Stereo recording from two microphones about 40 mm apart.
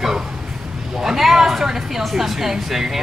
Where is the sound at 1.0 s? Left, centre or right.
Centre.